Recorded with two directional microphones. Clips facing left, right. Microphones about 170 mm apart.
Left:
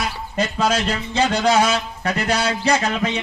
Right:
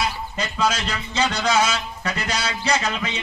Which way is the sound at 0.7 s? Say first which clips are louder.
Left 6 dB; 55° left (ahead or behind).